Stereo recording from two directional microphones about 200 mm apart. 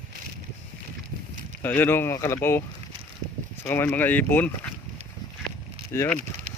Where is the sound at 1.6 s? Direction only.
10° left (ahead or behind).